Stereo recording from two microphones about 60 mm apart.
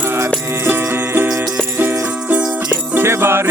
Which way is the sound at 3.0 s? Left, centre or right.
Right.